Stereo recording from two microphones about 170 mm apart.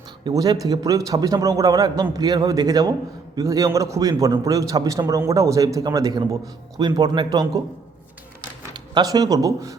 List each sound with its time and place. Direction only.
0.3 s a man's voice: 20° right (ahead or behind)
8.7 s speech: 25° right (ahead or behind)